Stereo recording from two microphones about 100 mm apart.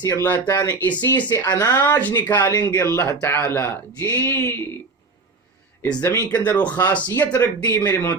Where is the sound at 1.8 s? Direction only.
20° left (ahead or behind).